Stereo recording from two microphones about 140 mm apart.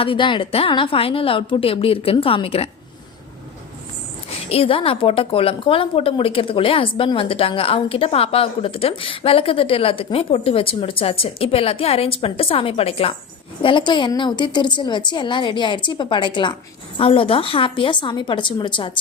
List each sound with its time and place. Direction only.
0.0 s a woman's voice: 40° left (ahead or behind)
4.4 s a woman's voice: 45° left (ahead or behind)